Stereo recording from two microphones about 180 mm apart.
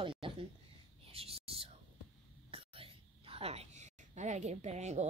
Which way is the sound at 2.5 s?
30° right (ahead or behind).